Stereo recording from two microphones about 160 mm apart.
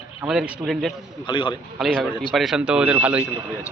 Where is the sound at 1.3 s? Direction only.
30° left (ahead or behind).